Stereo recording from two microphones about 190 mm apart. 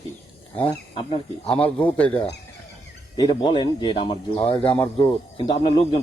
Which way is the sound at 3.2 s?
25° left (ahead or behind).